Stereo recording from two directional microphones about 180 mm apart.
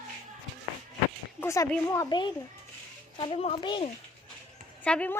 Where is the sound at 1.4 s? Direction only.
15° left (ahead or behind); by 3.9 s 30° left (ahead or behind).